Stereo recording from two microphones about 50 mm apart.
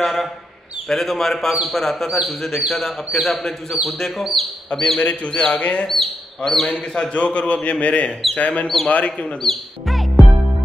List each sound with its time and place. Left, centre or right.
0.0 s a man's voice: centre
4.9 s a man's voice: left
5.9 s speech: centre
7.1 s a man's voice: left
9.4 s music: centre